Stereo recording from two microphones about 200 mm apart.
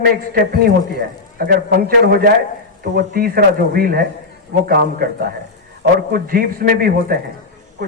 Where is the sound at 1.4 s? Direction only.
50° right (ahead or behind).